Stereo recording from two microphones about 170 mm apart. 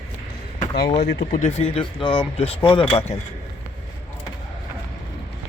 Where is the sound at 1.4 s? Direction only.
35° left (ahead or behind).